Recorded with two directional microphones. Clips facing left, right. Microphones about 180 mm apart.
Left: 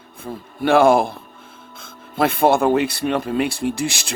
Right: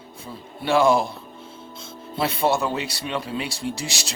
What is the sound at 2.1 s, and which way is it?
Speech, 50° left (ahead or behind).